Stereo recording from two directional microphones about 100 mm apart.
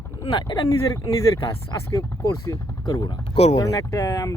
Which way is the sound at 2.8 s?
45° left (ahead or behind).